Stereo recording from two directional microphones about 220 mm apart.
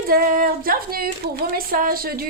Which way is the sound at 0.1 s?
40° right (ahead or behind).